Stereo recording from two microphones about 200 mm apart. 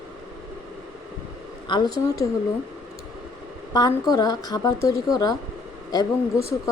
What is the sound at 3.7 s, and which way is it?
A woman's voice, 20° left (ahead or behind).